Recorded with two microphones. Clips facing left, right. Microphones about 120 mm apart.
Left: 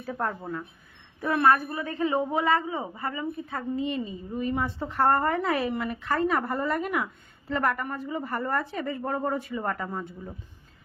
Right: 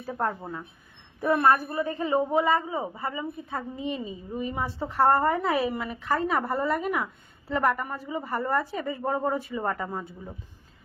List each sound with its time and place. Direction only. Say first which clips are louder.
0.0 s speech: right 1 dB; 10° right (ahead or behind)
1.6 s a woman's voice: right 1 dB; 20° right (ahead or behind)
2.3 s a woman's voice: right 1 dB; centre (ahead or behind)
2.6 s a woman's voice: right 1 dB; 15° right (ahead or behind)